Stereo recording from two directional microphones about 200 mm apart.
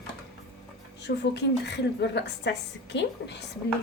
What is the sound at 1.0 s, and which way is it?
A woman's voice, 60° left (ahead or behind).